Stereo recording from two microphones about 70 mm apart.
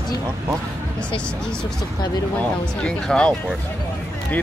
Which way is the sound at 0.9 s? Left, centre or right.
Centre.